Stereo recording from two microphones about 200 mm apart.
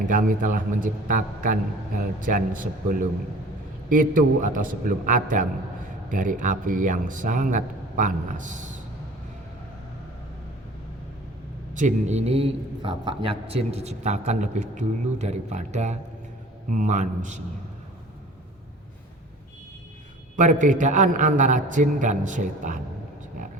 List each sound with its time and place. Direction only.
0.1 s a man's voice: 45° right (ahead or behind)
11.8 s a man's voice: 35° right (ahead or behind)
20.3 s a man's voice: 40° right (ahead or behind)